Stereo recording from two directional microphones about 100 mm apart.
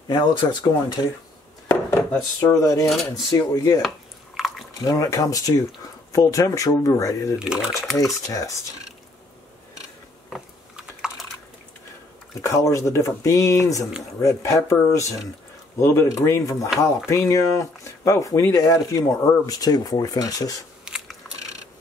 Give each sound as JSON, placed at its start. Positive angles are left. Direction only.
{"t": 0.1, "sound": "speech", "side_deg": 50}
{"t": 1.7, "sound": "chopping", "side_deg": 25}
{"t": 2.1, "sound": "speech", "side_deg": 35}
{"t": 2.9, "sound": "cutlery", "side_deg": 0}
{"t": 3.3, "sound": "speech", "side_deg": 40}
{"t": 4.4, "sound": "drip", "side_deg": 0}
{"t": 4.8, "sound": "speech", "side_deg": 35}
{"t": 7.3, "sound": "speech", "side_deg": -5}
{"t": 8.0, "sound": "speech", "side_deg": 35}
{"t": 10.3, "sound": "typing", "side_deg": -5}
{"t": 12.4, "sound": "speech", "side_deg": 30}
{"t": 20.8, "sound": "biting", "side_deg": -5}